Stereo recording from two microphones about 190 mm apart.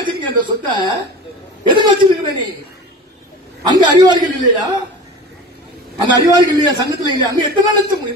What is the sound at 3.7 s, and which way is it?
Speech, 25° right (ahead or behind).